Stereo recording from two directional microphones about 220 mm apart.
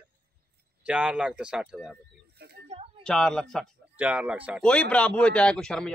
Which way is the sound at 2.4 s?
50° right (ahead or behind).